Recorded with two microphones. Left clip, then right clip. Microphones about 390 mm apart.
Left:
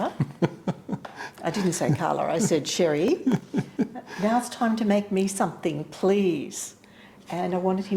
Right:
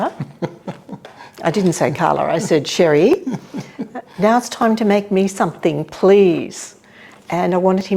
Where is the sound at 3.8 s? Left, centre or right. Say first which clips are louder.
Right 1 dB; left.